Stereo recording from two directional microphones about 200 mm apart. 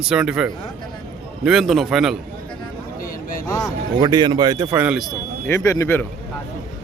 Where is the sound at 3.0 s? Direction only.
45° left (ahead or behind).